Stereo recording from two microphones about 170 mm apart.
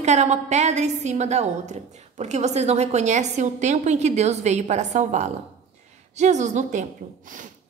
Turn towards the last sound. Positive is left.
turn(degrees=-45)  # may be behind; listen again after turning